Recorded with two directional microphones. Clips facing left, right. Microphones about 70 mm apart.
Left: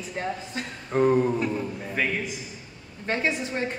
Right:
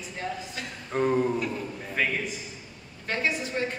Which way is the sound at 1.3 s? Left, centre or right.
Centre.